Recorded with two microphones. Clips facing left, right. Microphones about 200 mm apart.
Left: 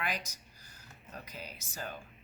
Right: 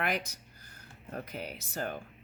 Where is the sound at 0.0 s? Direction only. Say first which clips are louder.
Right 5 dB; 60° right (ahead or behind).